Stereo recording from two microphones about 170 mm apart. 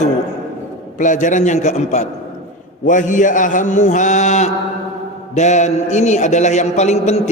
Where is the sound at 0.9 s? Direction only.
50° left (ahead or behind).